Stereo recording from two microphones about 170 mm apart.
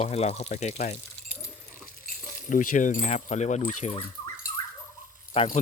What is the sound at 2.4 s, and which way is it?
Speech, 50° left (ahead or behind).